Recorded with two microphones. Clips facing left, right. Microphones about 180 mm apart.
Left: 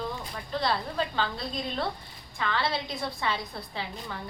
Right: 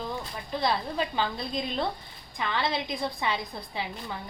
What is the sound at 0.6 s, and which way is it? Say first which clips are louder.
A woman's voice: right 1 dB; 15° right (ahead or behind).